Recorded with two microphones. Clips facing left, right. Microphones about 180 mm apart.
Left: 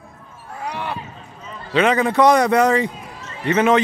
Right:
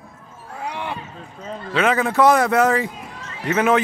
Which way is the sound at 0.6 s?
20° right (ahead or behind).